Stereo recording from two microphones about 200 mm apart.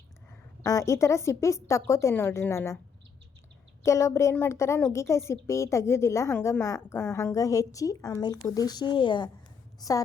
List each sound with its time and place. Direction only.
0.6 s a woman's voice: 15° left (ahead or behind)
3.8 s a woman's voice: 15° left (ahead or behind)